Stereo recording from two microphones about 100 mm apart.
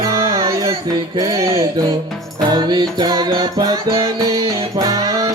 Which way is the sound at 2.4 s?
50° right (ahead or behind).